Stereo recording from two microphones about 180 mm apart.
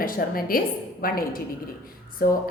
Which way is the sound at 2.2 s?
55° left (ahead or behind).